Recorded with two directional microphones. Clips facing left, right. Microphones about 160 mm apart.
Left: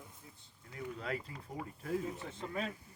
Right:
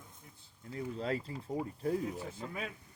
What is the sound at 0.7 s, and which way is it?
Speech, 30° right (ahead or behind).